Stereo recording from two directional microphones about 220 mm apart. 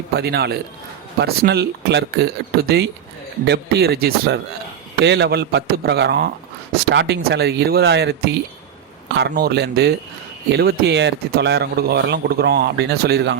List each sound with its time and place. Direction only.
0.2 s speech: 45° right (ahead or behind)